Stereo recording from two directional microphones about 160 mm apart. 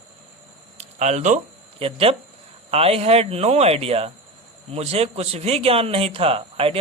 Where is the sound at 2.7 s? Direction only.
40° right (ahead or behind).